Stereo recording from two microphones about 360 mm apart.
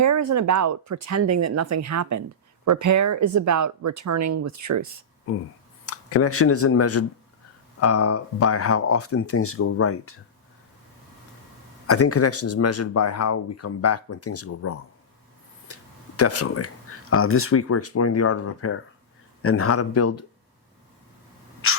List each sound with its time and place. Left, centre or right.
0.0 s speech: right
5.8 s speech: left
11.9 s speech: left
15.6 s tick-tock: left
17.1 s speech: left
21.6 s a sound: left